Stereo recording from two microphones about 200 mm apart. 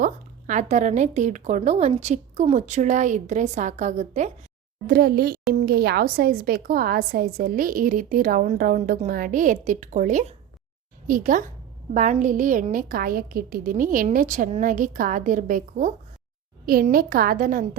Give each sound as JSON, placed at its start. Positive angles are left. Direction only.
{"t": 0.0, "sound": "speech", "side_deg": -40}
{"t": 4.9, "sound": "a woman's voice", "side_deg": -50}